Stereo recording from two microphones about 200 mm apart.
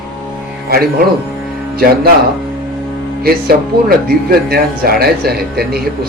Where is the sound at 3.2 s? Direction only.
50° right (ahead or behind).